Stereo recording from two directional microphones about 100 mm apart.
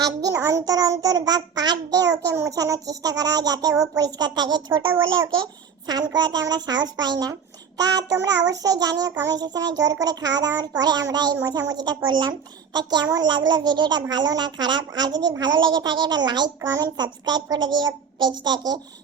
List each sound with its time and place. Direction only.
0.0 s a child's voice: 40° right (ahead or behind)
16.6 s a child's voice: 35° right (ahead or behind)
16.8 s a child's voice: 45° right (ahead or behind)